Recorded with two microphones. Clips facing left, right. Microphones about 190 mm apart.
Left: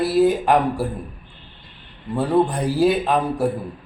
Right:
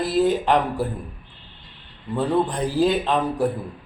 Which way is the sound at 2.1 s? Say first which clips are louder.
Left 3 dB; 10° left (ahead or behind).